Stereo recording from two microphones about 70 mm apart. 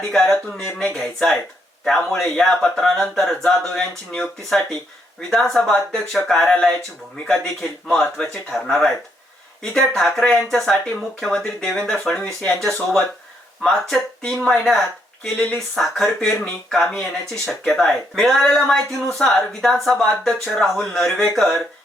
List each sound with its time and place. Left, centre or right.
0.0 s speech: centre
15.2 s speech: centre
15.7 s speech: centre